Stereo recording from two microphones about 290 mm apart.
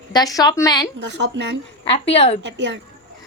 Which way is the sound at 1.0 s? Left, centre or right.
Right.